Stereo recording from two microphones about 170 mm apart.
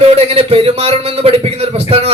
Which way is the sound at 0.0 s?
35° right (ahead or behind).